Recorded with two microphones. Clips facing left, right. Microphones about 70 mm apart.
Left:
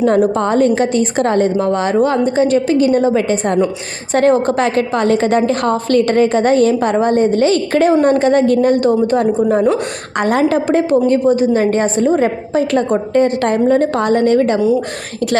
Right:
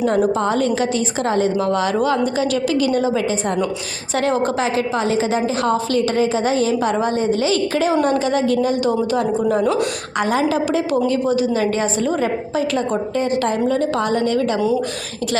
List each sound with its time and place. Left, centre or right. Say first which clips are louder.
0.0 s a woman's voice: left 4 dB; left
1.5 s a woman's voice: left 4 dB; left